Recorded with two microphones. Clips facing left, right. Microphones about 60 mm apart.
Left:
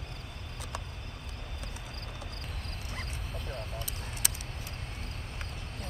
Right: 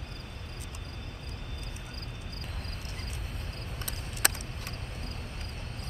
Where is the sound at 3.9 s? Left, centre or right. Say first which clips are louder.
Right 7 dB; right.